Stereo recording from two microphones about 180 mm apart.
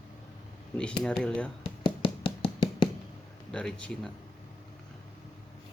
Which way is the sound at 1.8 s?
25° left (ahead or behind).